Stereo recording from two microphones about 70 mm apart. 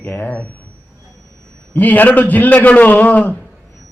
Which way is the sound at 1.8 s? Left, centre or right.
Left.